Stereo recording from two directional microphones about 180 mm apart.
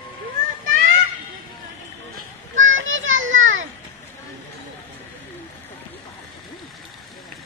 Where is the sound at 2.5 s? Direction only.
90° right.